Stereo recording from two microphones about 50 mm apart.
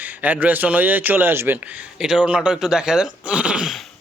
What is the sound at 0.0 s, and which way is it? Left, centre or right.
Speech, right.